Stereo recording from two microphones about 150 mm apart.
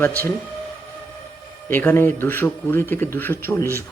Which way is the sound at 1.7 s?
15° left (ahead or behind).